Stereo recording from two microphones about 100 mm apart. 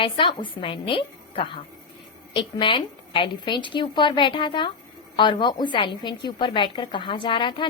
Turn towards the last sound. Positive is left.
turn(degrees=55)  # may be behind; listen again after turning